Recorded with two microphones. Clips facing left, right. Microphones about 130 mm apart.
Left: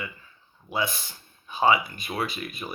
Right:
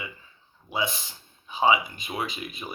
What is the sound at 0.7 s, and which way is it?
Speech, 20° right (ahead or behind).